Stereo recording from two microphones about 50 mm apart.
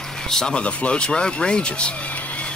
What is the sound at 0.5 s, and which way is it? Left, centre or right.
Speech, left.